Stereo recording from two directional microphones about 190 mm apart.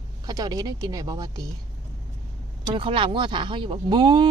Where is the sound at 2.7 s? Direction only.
25° right (ahead or behind).